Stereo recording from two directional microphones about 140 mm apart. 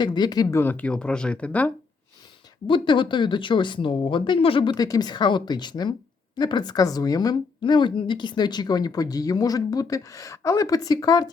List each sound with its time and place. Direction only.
0.0 s speech: 30° left (ahead or behind)
0.4 s speech: 15° left (ahead or behind)
2.6 s a woman's voice: 35° left (ahead or behind)